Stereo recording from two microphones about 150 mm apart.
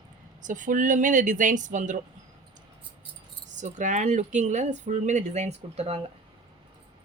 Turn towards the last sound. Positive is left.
turn(degrees=-40)  # may be behind; listen again after turning